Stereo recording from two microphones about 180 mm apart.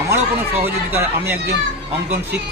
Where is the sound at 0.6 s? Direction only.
10° right (ahead or behind).